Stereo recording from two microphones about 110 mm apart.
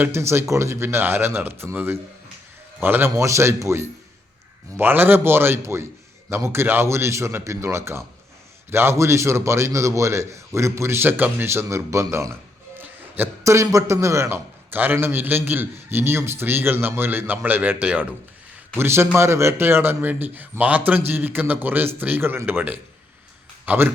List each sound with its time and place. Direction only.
0.0 s a man's voice: 25° right (ahead or behind)
12.7 s a man's voice: 15° right (ahead or behind)